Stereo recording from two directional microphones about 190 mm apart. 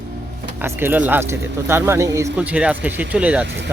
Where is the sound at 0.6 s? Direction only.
10° right (ahead or behind).